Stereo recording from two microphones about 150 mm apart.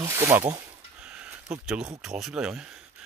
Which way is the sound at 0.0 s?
20° right (ahead or behind).